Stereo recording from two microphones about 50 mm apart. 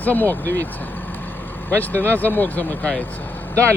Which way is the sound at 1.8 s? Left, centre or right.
Left.